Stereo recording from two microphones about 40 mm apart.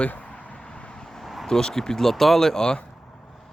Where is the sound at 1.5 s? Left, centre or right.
Centre.